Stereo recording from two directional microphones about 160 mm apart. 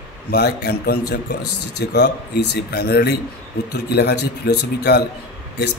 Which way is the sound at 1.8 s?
90° left.